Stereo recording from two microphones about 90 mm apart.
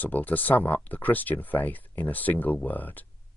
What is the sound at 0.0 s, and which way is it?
Speech, 20° left (ahead or behind).